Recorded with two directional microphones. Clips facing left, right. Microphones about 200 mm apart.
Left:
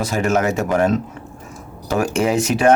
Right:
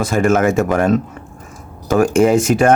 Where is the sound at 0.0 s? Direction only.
50° right (ahead or behind).